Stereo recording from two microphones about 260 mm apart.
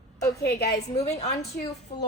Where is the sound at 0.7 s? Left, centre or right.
Centre.